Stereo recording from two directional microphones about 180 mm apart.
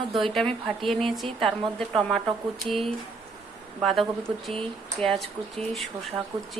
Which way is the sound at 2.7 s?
Centre (ahead or behind).